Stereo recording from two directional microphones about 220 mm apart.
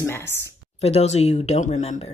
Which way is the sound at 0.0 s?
10° left (ahead or behind).